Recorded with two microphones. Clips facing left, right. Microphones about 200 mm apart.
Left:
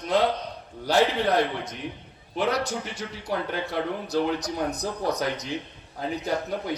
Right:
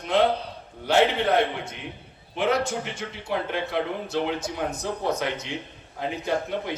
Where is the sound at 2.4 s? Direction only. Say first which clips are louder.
Right 2 dB; 35° left (ahead or behind).